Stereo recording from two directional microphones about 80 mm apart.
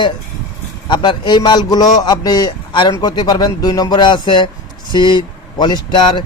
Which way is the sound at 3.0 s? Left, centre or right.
Left.